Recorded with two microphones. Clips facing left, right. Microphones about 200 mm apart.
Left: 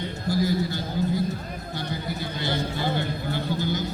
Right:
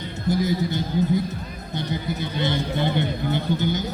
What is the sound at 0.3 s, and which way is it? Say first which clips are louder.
A man's voice: right 2 dB; 20° right (ahead or behind).